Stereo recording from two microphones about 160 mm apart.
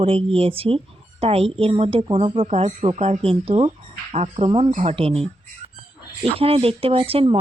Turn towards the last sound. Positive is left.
turn(degrees=-35)  # may be behind; listen again after turning